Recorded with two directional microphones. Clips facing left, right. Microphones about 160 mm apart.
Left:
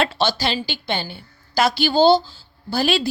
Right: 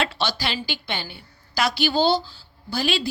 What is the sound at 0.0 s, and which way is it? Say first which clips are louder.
A woman's voice: left 5 dB; 25° left (ahead or behind).